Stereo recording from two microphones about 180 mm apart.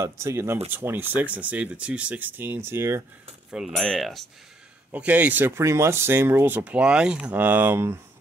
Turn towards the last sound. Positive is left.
turn(degrees=-15)  # may be behind; listen again after turning